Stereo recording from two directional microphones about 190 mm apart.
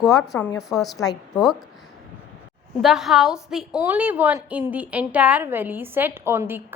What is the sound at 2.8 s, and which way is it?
A woman's voice, centre (ahead or behind).